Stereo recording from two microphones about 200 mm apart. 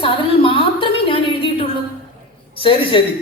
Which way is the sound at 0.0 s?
25° left (ahead or behind).